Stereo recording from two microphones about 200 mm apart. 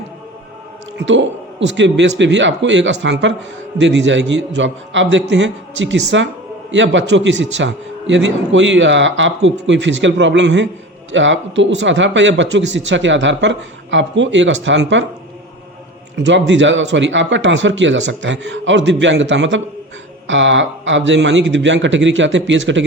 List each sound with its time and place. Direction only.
0.9 s a man's voice: 65° right (ahead or behind)
16.1 s a man's voice: 65° right (ahead or behind)